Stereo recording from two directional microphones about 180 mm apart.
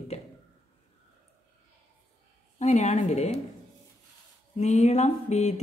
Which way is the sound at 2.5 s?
40° left (ahead or behind).